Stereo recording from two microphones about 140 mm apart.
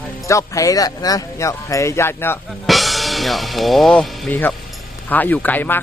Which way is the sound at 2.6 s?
Centre (ahead or behind).